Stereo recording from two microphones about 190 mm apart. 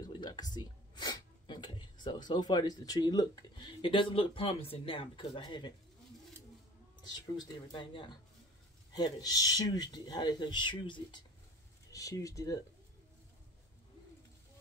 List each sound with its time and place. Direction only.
0.0 s a sound: 20° left (ahead or behind)
0.6 s speech: 20° left (ahead or behind)
7.3 s speech: 20° left (ahead or behind)